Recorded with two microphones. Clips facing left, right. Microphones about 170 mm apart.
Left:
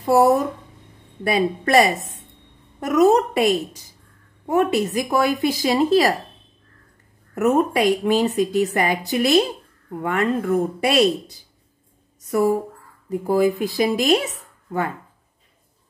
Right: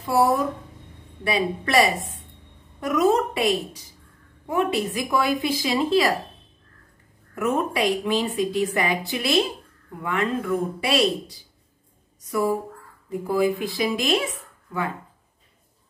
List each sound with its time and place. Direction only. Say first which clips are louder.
0.0 s a woman's voice: left 5 dB; 45° left (ahead or behind)
7.3 s a woman's voice: left 5 dB; 45° left (ahead or behind)
13.6 s speech: left 5 dB; 40° left (ahead or behind)